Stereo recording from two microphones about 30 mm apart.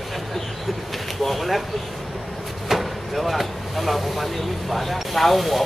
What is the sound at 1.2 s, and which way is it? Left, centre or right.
Speech, centre.